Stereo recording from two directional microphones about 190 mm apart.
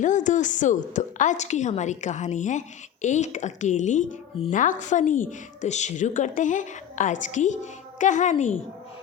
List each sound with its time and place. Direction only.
0.0 s a woman's voice: 40° left (ahead or behind)